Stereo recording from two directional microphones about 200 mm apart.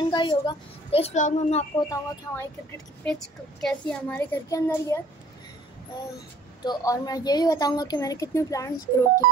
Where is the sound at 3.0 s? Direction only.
5° left (ahead or behind).